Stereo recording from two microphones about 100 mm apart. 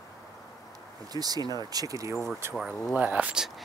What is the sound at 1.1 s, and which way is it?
Speech, 40° right (ahead or behind).